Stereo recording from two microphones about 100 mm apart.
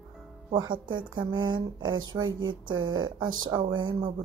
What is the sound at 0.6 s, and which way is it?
A woman's voice, 45° right (ahead or behind).